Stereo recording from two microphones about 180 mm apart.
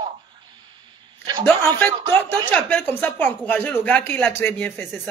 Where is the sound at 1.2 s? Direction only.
25° right (ahead or behind).